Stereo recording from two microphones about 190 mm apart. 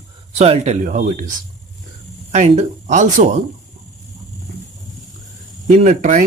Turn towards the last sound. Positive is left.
turn(degrees=-40)  # may be behind; listen again after turning